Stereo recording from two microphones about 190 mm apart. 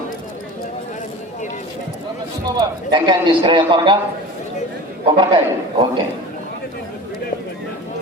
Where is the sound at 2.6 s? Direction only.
25° right (ahead or behind).